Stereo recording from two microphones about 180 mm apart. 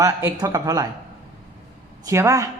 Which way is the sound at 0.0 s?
20° right (ahead or behind).